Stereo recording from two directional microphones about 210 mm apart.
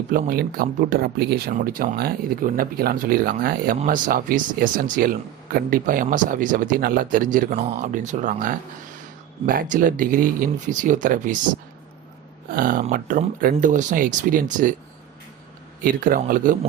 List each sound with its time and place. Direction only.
0.1 s speech: 45° right (ahead or behind)
12.5 s speech: 40° right (ahead or behind)
15.8 s speech: 40° right (ahead or behind)